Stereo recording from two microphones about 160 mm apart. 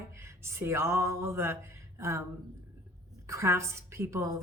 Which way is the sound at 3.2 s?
20° right (ahead or behind).